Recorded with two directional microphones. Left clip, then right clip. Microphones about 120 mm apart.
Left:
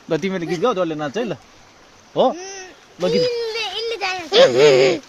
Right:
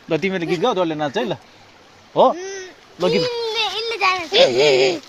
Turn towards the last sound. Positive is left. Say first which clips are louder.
# left 2 dB
turn(degrees=35)  # may be behind; listen again after turning